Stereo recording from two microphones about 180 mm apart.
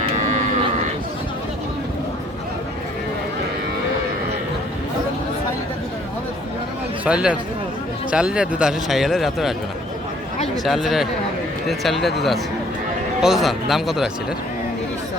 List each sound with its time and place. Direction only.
0.2 s livestock: 40° right (ahead or behind)
7.0 s a man's voice: 5° right (ahead or behind)
10.6 s a man's voice: centre (ahead or behind)
13.2 s a man's voice: centre (ahead or behind)